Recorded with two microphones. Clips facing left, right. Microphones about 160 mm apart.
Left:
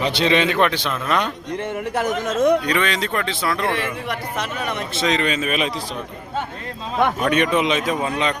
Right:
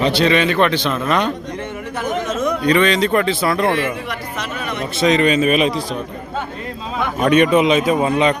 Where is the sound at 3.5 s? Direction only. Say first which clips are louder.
Right 5 dB; 50° right (ahead or behind).